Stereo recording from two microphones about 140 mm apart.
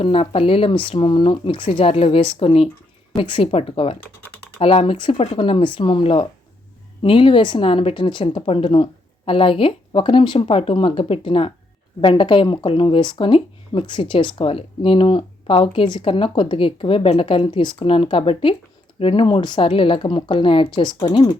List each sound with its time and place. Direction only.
0.0 s speech: 40° left (ahead or behind)